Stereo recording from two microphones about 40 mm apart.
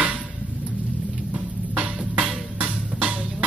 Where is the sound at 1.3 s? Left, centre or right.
Right.